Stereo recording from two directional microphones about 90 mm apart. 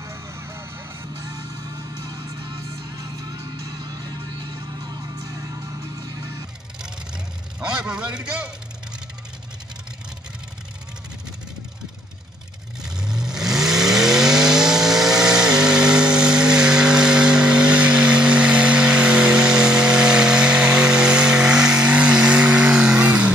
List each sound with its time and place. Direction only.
0.0 s music: 30° right (ahead or behind)
7.6 s a man's voice: 10° right (ahead or behind)
12.8 s vehicle: 5° right (ahead or behind)